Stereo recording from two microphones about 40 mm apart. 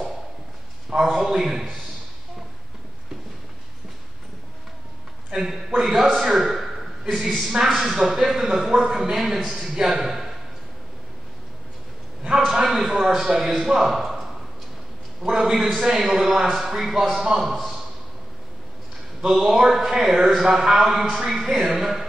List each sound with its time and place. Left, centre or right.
0.8 s a sound: centre
1.2 s a man's voice: centre
5.3 s a man's voice: centre
12.4 s speech: centre
13.7 s a sound: centre
15.2 s a man's voice: centre
15.5 s a man's voice: centre
19.6 s a man's voice: centre